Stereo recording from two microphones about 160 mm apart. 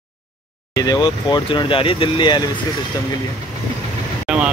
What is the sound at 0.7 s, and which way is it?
Speech, 25° left (ahead or behind).